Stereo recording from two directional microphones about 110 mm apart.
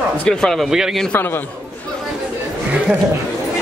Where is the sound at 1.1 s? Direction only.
20° left (ahead or behind).